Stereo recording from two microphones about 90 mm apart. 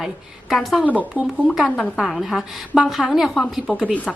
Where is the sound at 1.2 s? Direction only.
15° right (ahead or behind).